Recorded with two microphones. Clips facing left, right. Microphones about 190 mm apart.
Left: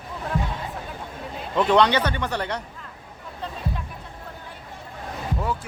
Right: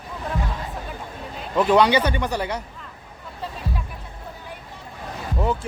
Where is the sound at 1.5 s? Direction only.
10° right (ahead or behind).